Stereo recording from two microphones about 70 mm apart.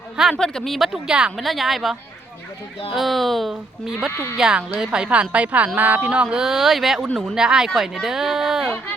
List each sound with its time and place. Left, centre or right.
0.3 s speech: centre
1.0 s speech: centre
1.4 s speech: centre
4.1 s speech: left
4.4 s speech: centre
6.2 s speech: centre